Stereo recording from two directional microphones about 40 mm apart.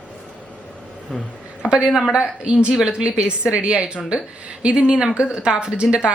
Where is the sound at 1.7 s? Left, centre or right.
Right.